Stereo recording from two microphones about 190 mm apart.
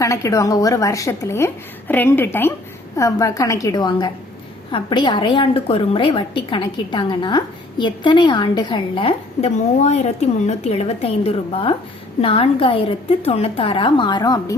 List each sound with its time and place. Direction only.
0.0 s a woman's voice: 15° left (ahead or behind)